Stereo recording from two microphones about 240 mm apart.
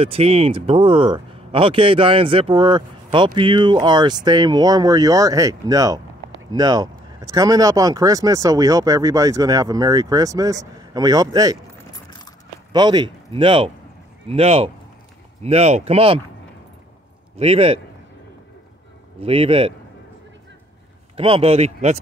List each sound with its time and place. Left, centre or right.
0.0 s speech: right
6.5 s a sound: centre
7.3 s speech: centre
12.7 s speech: centre
17.4 s speech: right
19.2 s speech: right
21.2 s speech: right